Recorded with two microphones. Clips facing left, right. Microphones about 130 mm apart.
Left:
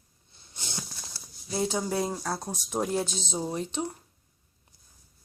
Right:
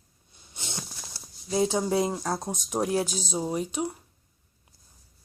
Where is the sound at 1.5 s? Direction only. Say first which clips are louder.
Right 4 dB; 20° right (ahead or behind).